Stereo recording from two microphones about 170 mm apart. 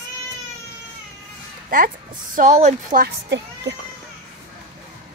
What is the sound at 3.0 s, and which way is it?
Speech, 90° right.